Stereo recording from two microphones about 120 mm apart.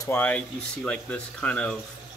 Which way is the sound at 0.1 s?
15° left (ahead or behind).